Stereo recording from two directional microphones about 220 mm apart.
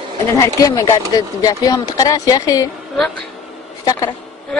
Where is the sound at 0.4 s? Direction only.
15° left (ahead or behind).